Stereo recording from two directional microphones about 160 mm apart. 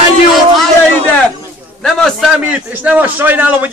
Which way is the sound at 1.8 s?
Centre (ahead or behind).